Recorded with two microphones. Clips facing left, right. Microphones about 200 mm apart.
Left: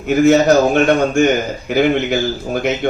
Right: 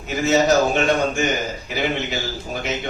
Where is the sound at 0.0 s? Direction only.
55° left (ahead or behind).